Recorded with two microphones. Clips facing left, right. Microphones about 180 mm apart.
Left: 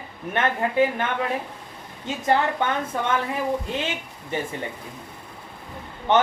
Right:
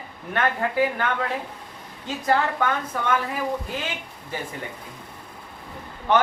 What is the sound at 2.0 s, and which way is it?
A woman's voice, 25° left (ahead or behind).